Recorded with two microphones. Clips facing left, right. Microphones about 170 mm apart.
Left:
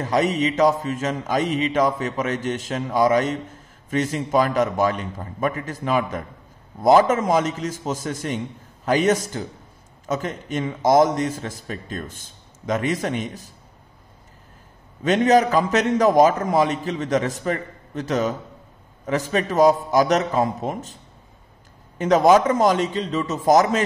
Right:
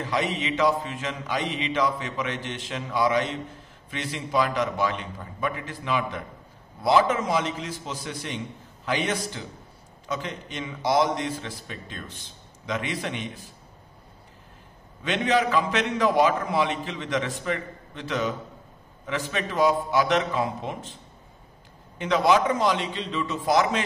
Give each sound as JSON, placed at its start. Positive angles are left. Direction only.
{"t": 0.0, "sound": "a man's voice", "side_deg": 40}
{"t": 15.0, "sound": "a man's voice", "side_deg": 40}